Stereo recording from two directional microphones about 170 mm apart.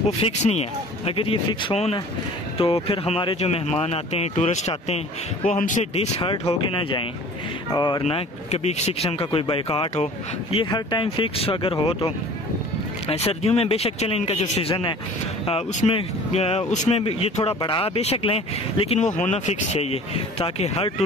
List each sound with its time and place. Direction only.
0.2 s speech: 40° left (ahead or behind); by 8.0 s 25° left (ahead or behind)
8.0 s speech: 40° left (ahead or behind)
13.1 s speech: 35° left (ahead or behind)